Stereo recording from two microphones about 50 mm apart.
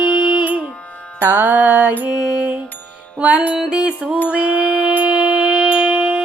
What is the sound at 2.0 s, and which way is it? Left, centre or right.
Music, centre.